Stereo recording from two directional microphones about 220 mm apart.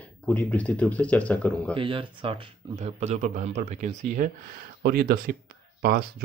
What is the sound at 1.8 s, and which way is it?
Speech, 25° right (ahead or behind).